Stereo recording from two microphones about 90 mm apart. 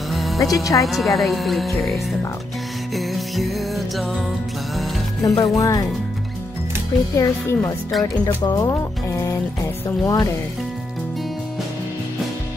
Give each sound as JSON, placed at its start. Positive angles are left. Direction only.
{"t": 0.1, "sound": "music", "side_deg": 0}
{"t": 0.5, "sound": "speech", "side_deg": 40}
{"t": 0.8, "sound": "speech", "side_deg": 0}
{"t": 3.0, "sound": "music", "side_deg": 0}
{"t": 5.4, "sound": "speech", "side_deg": 40}
{"t": 7.2, "sound": "speech", "side_deg": 30}
{"t": 8.0, "sound": "speech", "side_deg": 40}